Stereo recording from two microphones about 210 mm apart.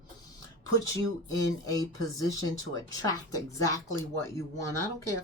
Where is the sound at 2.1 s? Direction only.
15° left (ahead or behind).